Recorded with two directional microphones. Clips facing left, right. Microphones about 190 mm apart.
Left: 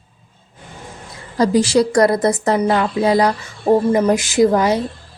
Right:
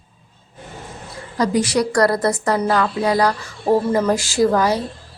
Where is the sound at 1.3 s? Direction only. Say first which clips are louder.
Left 4 dB; 30° left (ahead or behind).